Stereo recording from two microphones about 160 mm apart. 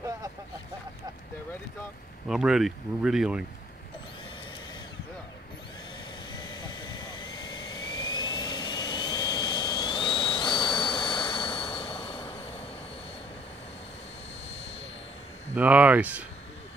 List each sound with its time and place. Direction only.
2.2 s speech: 5° right (ahead or behind)
6.3 s jet engine: 25° left (ahead or behind)
15.5 s speech: 10° right (ahead or behind)